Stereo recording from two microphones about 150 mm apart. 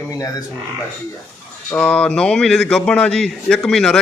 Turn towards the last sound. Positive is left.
turn(degrees=5)  # may be behind; listen again after turning